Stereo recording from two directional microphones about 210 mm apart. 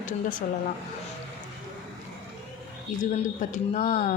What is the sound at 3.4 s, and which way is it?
Speech, 35° left (ahead or behind).